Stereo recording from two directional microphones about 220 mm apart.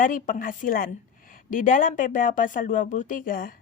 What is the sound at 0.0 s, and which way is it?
A woman's voice, 40° left (ahead or behind).